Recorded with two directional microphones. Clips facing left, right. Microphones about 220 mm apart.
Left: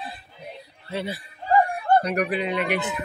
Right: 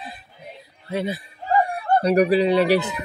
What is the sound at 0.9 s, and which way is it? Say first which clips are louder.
Speech: right 4 dB; 15° right (ahead or behind).